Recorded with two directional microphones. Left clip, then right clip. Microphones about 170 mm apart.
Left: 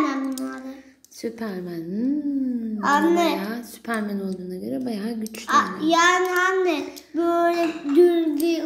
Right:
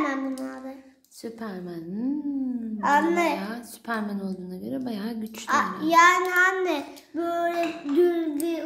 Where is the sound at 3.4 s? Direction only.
5° left (ahead or behind).